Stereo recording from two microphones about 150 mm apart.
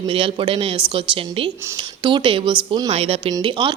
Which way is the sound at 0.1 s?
35° right (ahead or behind).